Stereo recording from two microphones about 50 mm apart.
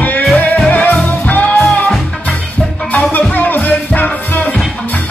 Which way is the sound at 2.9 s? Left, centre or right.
Left.